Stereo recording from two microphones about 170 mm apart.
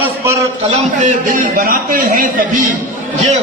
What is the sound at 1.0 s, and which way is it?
A man's voice, 50° right (ahead or behind).